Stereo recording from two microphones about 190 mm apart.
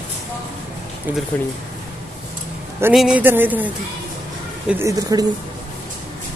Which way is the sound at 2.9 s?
5° right (ahead or behind).